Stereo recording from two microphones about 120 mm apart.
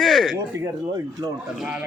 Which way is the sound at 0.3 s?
25° right (ahead or behind).